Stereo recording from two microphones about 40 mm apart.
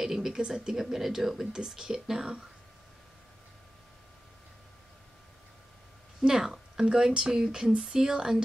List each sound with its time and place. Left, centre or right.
0.0 s speech: centre
6.2 s a woman's voice: centre